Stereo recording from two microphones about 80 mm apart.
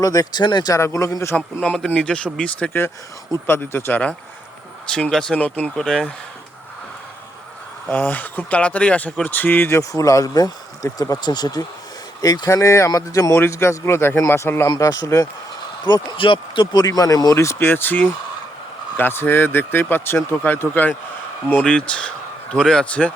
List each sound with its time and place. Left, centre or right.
0.0 s speech: left
0.3 s speech: left
0.7 s a man's voice: left
1.6 s a man's voice: centre
3.4 s speech: left
4.9 s speech: centre
7.9 s speech: centre
9.7 s speech: left
13.3 s a man's voice: left
14.8 s speech: left
16.1 s speech: left
16.8 s speech: left
17.3 s a man's voice: left; by 22.9 s centre
22.9 s speech: centre